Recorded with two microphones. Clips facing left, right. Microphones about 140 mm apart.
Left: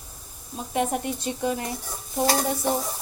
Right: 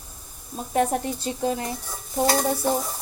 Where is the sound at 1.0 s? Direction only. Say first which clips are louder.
Right 1 dB; 30° right (ahead or behind).